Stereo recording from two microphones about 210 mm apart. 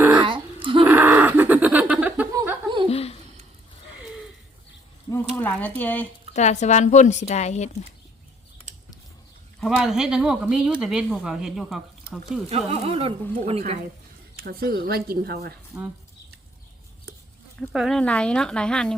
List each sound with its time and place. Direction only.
0.2 s a sound: 25° right (ahead or behind)
0.9 s chuckle: 10° right (ahead or behind)
2.9 s a sound: 30° left (ahead or behind)
5.4 s speech: 10° left (ahead or behind)
6.3 s a woman's voice: 35° left (ahead or behind)
9.6 s speech: centre (ahead or behind)
12.5 s speech: 30° right (ahead or behind)
14.3 s speech: 45° right (ahead or behind)
15.7 s speech: 10° right (ahead or behind)
17.6 s speech: centre (ahead or behind)